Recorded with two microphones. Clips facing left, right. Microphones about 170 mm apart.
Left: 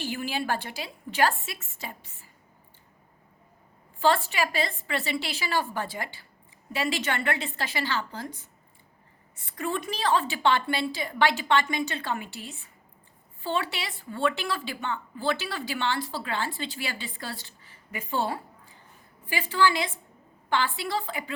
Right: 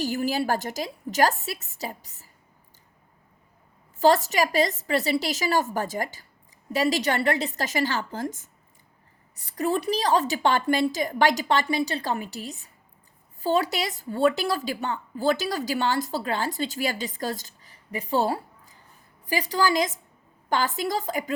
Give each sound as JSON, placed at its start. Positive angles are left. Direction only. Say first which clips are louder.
{"t": 0.0, "sound": "a woman's voice", "louder": "right 6 dB", "side_deg": -40}
{"t": 4.0, "sound": "a woman's voice", "louder": "right 4 dB", "side_deg": -40}